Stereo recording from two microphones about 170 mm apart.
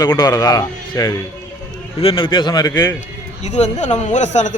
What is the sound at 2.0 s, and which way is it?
Speech, 30° left (ahead or behind).